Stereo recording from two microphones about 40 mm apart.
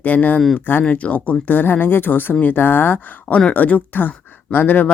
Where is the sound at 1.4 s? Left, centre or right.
Left.